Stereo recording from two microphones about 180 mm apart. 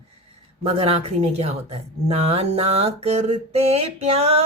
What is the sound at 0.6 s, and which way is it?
A woman's voice, 35° right (ahead or behind).